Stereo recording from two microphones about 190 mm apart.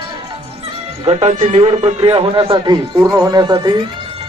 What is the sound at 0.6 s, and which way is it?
Speech, 30° right (ahead or behind).